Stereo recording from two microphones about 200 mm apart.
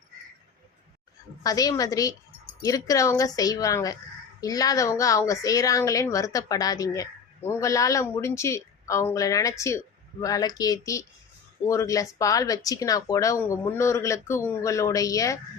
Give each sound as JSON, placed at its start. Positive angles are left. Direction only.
{"t": 1.5, "sound": "a woman's voice", "side_deg": 20}